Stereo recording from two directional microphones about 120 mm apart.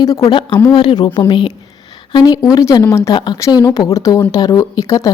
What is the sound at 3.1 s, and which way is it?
Speech, 35° left (ahead or behind).